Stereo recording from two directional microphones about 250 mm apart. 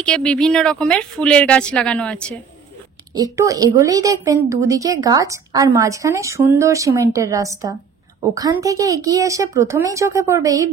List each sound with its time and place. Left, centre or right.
0.0 s speech: centre
3.3 s a woman's voice: centre